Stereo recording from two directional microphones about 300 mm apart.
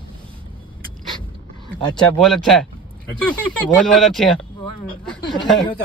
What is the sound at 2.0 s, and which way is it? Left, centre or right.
Speech, centre.